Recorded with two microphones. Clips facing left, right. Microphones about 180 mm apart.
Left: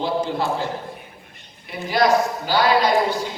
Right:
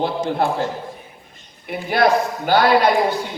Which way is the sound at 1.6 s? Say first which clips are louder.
Right 2 dB; 55° right (ahead or behind).